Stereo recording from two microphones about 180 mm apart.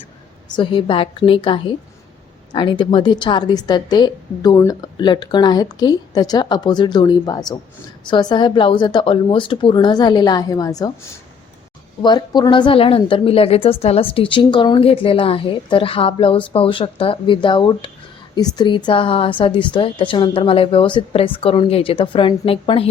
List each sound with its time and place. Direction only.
0.4 s a woman's voice: 25° left (ahead or behind)
12.0 s a woman's voice: 25° left (ahead or behind)